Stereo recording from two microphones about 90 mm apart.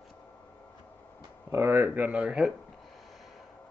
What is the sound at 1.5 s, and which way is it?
Speech, 30° right (ahead or behind).